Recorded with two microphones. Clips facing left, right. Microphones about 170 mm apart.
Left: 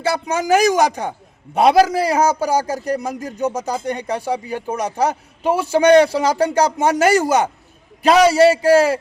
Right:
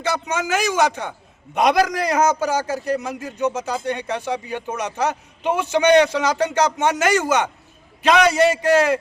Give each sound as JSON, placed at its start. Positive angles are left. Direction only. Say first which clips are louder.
{"t": 0.3, "sound": "a man's voice", "louder": "left 10 dB", "side_deg": 35}